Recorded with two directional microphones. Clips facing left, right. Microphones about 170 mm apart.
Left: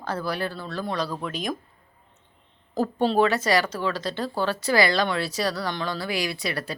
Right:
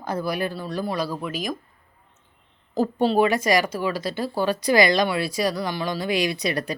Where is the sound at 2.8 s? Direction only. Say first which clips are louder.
Right 2 dB; 5° right (ahead or behind).